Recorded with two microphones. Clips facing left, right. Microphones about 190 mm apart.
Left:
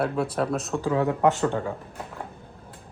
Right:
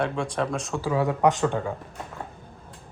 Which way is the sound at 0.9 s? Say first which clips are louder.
Even; 15° right (ahead or behind).